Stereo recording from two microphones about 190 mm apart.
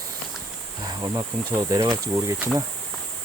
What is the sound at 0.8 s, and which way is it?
Speech, 20° right (ahead or behind).